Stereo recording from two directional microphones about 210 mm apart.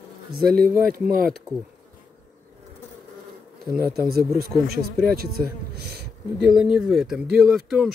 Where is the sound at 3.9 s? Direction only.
45° right (ahead or behind).